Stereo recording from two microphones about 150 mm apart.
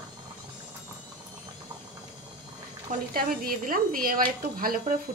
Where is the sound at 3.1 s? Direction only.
75° right (ahead or behind).